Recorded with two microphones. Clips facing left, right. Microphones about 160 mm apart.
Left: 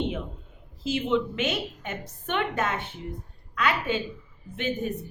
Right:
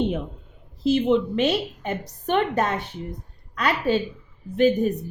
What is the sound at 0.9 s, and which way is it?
A woman's voice, 35° right (ahead or behind).